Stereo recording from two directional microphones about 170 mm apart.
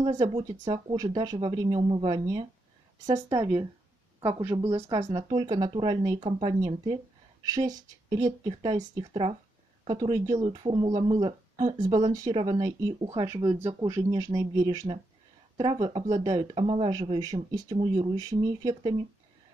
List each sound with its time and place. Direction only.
0.1 s speech: 30° right (ahead or behind); by 4.9 s 15° right (ahead or behind)
4.9 s speech: 25° right (ahead or behind)